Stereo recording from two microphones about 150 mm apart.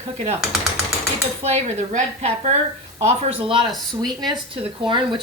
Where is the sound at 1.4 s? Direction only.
45° right (ahead or behind).